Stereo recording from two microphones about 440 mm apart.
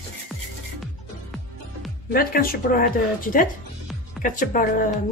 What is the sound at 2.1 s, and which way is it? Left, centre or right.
A woman's voice, centre.